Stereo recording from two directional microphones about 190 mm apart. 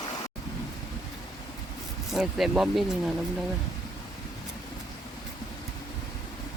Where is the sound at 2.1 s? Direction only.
Centre (ahead or behind).